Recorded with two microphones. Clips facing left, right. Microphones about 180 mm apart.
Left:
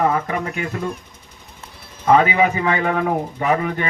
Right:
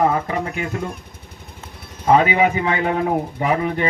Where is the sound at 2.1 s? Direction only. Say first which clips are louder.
Even; 30° right (ahead or behind).